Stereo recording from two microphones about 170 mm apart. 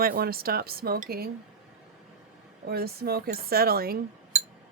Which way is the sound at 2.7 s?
65° right (ahead or behind).